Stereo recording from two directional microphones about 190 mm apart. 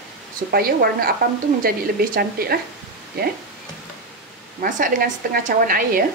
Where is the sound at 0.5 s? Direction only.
50° right (ahead or behind).